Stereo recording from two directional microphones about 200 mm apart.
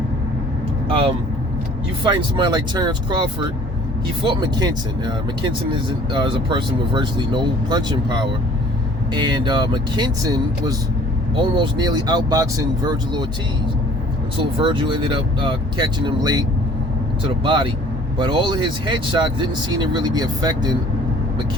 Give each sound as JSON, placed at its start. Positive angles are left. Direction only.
{"t": 0.9, "sound": "speech", "side_deg": -25}
{"t": 14.3, "sound": "speech", "side_deg": -25}